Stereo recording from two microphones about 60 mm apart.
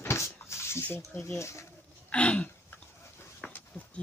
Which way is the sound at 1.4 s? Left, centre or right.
Left.